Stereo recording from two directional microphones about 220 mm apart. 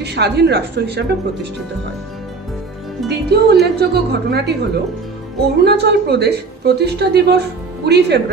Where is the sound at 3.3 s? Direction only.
50° right (ahead or behind).